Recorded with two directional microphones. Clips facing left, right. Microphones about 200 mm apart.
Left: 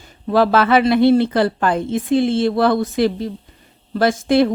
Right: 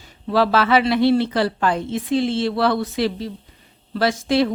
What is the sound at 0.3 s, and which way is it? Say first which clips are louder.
Speech: left 3 dB; 50° left (ahead or behind).